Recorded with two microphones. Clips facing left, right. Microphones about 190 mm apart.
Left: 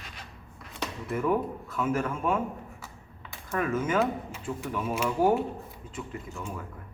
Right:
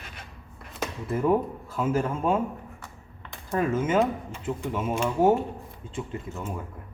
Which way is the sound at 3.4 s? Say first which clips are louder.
Right 3 dB; 30° right (ahead or behind).